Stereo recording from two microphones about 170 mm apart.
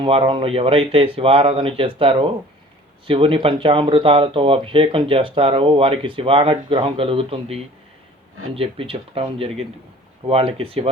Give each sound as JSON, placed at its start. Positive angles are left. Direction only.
{"t": 0.0, "sound": "speech", "side_deg": -30}